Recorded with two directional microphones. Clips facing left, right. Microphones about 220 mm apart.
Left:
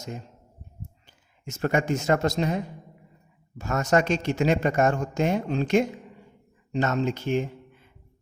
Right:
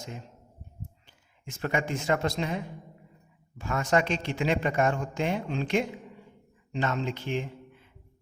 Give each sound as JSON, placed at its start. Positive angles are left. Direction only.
{"t": 1.0, "sound": "a man's voice", "side_deg": 40}